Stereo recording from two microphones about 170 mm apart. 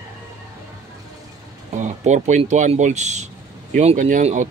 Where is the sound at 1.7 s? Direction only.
45° right (ahead or behind).